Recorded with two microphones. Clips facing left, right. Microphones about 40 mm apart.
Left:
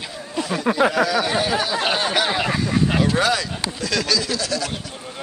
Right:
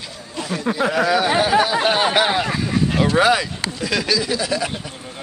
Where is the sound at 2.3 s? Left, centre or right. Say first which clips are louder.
Right 1 dB; centre.